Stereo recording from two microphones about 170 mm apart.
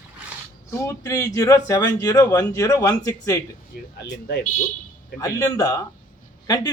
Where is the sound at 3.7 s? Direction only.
70° left (ahead or behind).